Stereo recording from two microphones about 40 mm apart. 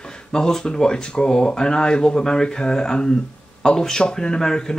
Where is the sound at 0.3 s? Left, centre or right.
Centre.